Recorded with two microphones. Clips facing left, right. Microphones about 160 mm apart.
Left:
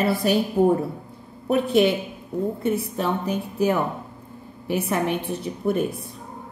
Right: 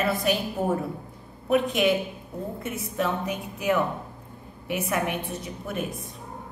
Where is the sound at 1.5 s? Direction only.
30° left (ahead or behind).